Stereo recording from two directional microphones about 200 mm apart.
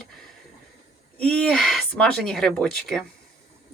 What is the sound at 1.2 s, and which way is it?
Speech, centre (ahead or behind).